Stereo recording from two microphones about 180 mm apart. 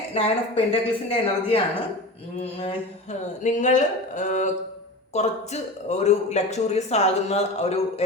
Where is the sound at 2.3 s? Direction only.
35° left (ahead or behind).